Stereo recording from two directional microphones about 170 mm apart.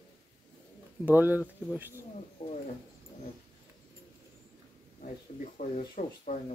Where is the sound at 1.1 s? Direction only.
10° right (ahead or behind).